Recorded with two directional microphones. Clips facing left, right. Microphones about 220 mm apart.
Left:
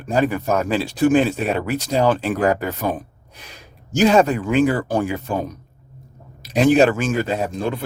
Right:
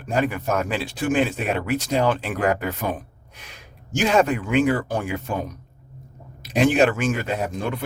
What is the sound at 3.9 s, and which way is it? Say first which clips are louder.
Speech: left 4 dB; 35° left (ahead or behind).